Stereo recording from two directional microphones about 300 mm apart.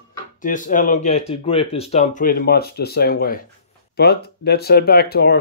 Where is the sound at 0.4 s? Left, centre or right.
Left.